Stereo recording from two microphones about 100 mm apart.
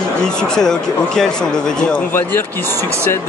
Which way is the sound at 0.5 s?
5° left (ahead or behind).